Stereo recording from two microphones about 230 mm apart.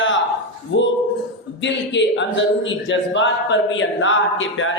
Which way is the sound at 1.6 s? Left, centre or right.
Left.